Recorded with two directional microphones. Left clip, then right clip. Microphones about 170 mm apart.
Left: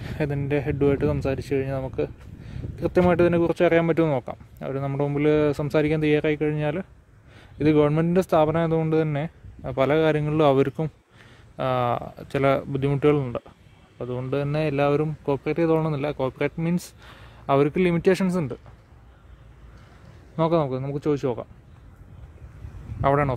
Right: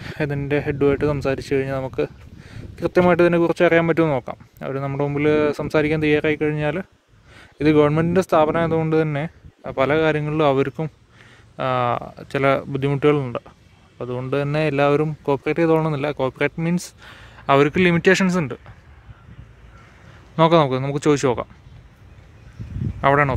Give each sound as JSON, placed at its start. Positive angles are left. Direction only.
{"t": 0.0, "sound": "speech", "side_deg": 0}
{"t": 20.3, "sound": "speech", "side_deg": -10}
{"t": 22.9, "sound": "speech", "side_deg": 0}